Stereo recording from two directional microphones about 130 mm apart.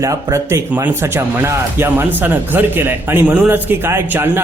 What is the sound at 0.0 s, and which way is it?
Speech, 25° right (ahead or behind).